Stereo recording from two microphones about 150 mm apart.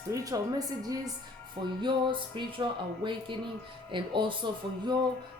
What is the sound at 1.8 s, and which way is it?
Speech, 30° right (ahead or behind).